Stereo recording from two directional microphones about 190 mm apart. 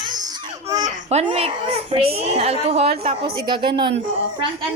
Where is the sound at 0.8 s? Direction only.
35° right (ahead or behind).